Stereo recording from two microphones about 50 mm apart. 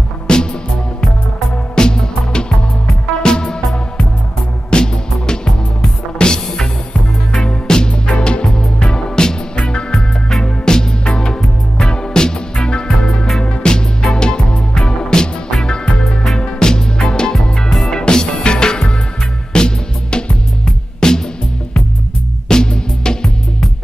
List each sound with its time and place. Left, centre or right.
0.3 s music: centre
1.8 s music: centre
16.0 s music: centre
16.3 s music: centre
17.3 s music: centre
17.8 s music: centre
22.5 s music: centre